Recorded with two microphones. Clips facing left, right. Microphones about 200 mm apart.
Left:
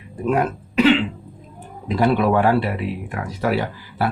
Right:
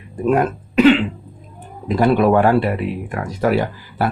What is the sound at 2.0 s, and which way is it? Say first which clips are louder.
Speech: right 3 dB; 50° right (ahead or behind).